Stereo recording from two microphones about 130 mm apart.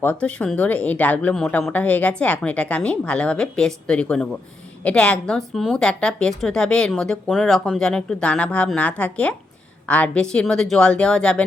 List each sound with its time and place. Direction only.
0.0 s a woman's voice: 10° left (ahead or behind)